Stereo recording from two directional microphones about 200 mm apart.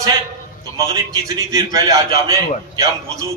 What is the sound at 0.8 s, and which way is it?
A man's voice, 15° right (ahead or behind).